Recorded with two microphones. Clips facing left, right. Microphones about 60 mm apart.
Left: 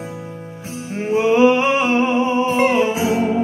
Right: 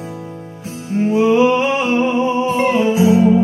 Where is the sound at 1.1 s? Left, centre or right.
Left.